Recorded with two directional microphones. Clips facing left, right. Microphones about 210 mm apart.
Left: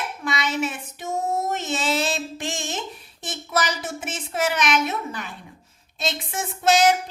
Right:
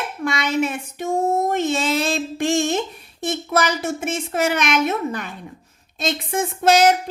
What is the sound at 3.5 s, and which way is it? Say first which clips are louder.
A woman's voice: right 3 dB; 50° right (ahead or behind).